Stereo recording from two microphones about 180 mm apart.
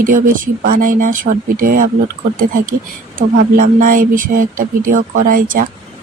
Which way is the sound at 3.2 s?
50° right (ahead or behind).